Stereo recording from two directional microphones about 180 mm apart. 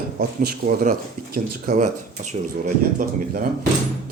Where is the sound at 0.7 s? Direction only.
50° right (ahead or behind).